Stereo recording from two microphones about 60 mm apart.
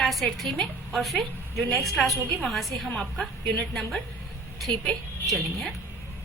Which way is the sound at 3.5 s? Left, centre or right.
Centre.